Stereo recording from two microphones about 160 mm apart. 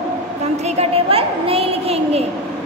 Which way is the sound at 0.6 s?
40° right (ahead or behind).